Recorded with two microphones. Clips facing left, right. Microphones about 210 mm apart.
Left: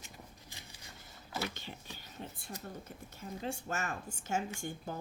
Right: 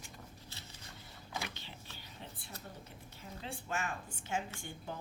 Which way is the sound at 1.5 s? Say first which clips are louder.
Left 5 dB; 45° left (ahead or behind).